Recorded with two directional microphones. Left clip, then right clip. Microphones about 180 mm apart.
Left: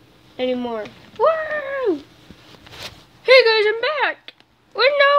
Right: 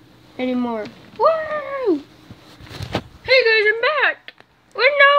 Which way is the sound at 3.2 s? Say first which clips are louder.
Left 3 dB; 35° left (ahead or behind).